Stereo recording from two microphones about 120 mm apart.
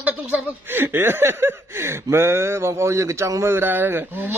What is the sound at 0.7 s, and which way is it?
Speech, 15° right (ahead or behind).